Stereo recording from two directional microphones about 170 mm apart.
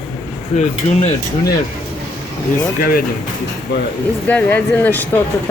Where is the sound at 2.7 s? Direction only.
55° left (ahead or behind).